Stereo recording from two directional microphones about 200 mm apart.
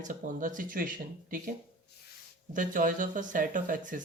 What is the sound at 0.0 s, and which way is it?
Speech, 40° right (ahead or behind).